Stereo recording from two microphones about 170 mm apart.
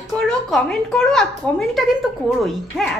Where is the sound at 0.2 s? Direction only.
5° left (ahead or behind).